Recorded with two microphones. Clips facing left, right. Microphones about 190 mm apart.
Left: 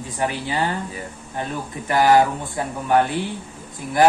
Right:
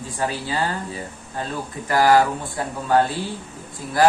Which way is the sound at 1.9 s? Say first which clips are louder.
Even; 20° left (ahead or behind).